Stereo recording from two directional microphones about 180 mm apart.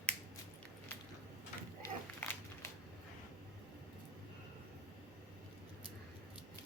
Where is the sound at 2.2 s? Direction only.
10° left (ahead or behind).